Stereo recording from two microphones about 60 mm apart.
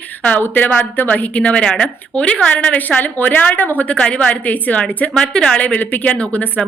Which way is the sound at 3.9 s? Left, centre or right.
Centre.